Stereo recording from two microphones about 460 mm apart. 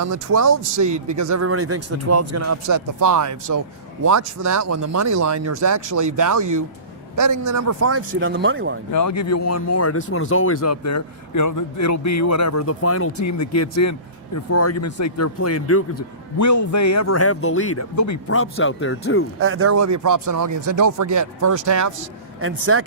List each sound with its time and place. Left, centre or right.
0.0 s speech: right
0.9 s speech: right
1.1 s speech: right
8.9 s speech: left
19.4 s speech: right
22.4 s speech: right